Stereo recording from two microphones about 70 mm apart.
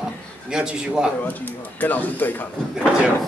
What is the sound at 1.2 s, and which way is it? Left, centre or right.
Speech, left.